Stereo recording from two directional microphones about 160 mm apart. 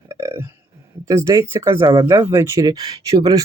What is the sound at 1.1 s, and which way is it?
Speech, 20° right (ahead or behind).